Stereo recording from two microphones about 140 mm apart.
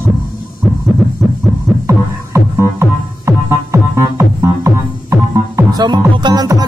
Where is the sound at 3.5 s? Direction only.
20° right (ahead or behind).